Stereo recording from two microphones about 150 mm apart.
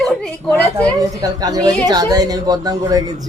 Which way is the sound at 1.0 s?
25° right (ahead or behind).